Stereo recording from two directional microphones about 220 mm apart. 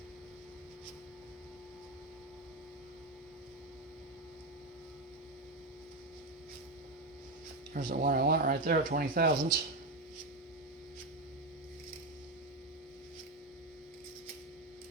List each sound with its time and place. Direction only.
7.7 s speech: 40° right (ahead or behind)